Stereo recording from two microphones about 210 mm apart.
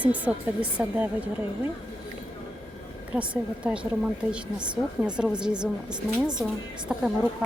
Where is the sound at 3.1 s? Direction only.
5° right (ahead or behind).